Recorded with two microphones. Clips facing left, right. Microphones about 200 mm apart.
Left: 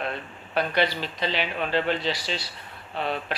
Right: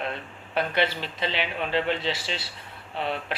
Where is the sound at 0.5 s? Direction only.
25° right (ahead or behind).